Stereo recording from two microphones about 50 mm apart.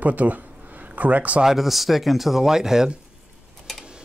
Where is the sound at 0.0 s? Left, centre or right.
Right.